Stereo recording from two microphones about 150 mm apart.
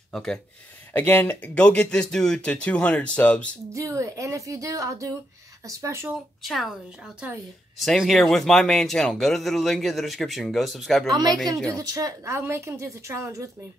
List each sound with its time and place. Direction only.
0.1 s speech: 5° left (ahead or behind)
3.7 s speech: 20° right (ahead or behind)
6.1 s a woman's voice: centre (ahead or behind)
11.1 s a woman's voice: 25° right (ahead or behind)